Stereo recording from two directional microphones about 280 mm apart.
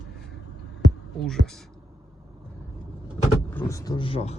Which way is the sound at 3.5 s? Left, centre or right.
Centre.